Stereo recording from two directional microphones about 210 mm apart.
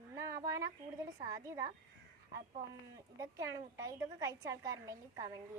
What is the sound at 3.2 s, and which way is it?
A woman's voice, 15° right (ahead or behind).